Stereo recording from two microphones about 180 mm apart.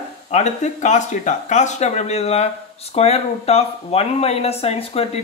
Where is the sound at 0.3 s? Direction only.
40° left (ahead or behind).